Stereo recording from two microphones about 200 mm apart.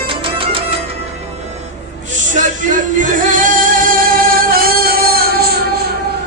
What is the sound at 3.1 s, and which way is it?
Music, 40° right (ahead or behind).